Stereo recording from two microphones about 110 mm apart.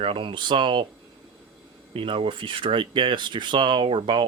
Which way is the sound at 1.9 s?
55° right (ahead or behind).